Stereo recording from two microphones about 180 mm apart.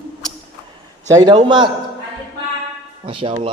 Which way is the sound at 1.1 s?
25° right (ahead or behind).